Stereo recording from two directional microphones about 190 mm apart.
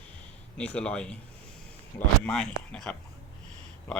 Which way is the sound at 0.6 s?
5° left (ahead or behind).